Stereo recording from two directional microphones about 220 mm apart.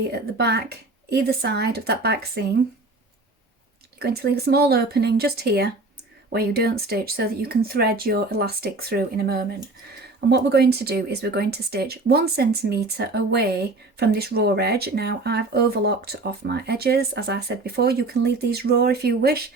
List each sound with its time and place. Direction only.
0.1 s speech: 50° right (ahead or behind)
4.0 s speech: 45° right (ahead or behind)